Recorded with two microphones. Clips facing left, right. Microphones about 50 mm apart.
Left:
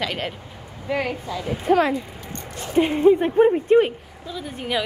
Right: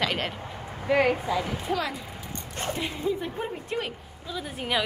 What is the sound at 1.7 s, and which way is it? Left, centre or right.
Speech, left.